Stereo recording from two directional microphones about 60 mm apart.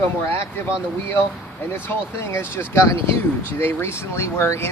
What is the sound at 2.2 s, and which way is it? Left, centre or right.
Speech, left.